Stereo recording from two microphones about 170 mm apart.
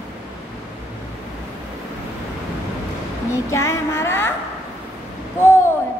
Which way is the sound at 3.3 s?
15° left (ahead or behind).